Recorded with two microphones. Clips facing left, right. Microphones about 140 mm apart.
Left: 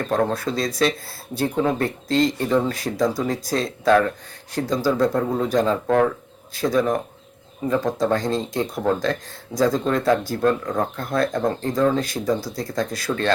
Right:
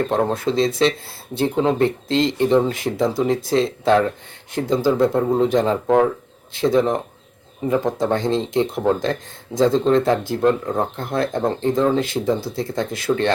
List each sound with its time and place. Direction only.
0.1 s speech: 25° right (ahead or behind)